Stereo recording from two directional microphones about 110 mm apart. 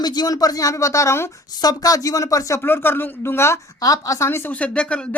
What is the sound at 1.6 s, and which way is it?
Speech, 35° left (ahead or behind).